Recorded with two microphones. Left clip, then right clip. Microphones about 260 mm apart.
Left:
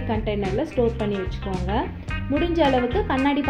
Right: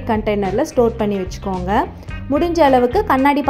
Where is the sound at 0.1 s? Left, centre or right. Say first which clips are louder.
Right 8 dB; right.